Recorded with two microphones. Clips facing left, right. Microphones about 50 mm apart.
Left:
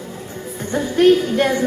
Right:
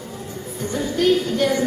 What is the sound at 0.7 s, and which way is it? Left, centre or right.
Speech, left.